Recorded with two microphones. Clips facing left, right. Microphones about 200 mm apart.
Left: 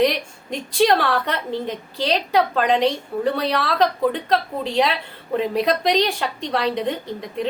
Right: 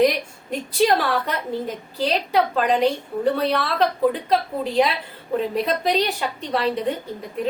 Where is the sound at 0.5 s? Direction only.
5° right (ahead or behind).